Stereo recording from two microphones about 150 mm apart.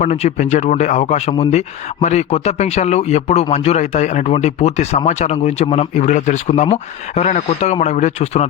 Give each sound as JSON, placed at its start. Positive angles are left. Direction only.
{"t": 0.0, "sound": "speech", "side_deg": 50}